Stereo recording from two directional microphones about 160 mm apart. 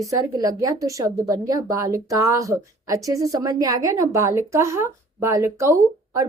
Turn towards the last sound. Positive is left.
turn(degrees=-20)  # may be behind; listen again after turning